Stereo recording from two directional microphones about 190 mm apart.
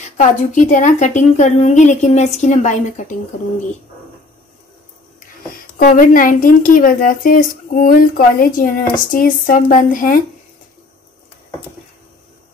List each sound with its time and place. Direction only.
0.2 s a woman's voice: 40° left (ahead or behind)
5.8 s a woman's voice: 45° left (ahead or behind)